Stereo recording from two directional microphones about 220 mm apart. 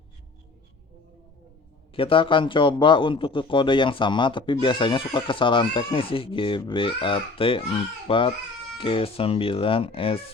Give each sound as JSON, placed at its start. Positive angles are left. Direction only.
{"t": 1.9, "sound": "a man's voice", "side_deg": 25}